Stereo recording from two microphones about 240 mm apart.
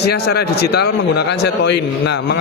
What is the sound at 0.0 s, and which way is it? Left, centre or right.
Speech, left.